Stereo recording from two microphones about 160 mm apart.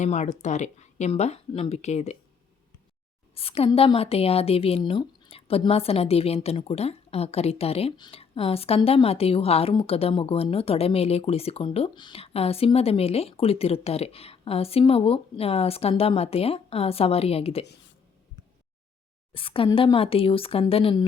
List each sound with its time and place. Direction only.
0.0 s speech: 45° left (ahead or behind)
3.3 s a woman's voice: 35° left (ahead or behind)
19.3 s a woman's voice: 35° left (ahead or behind)